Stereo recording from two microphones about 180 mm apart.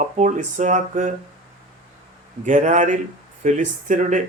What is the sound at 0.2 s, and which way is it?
Speech, 45° right (ahead or behind).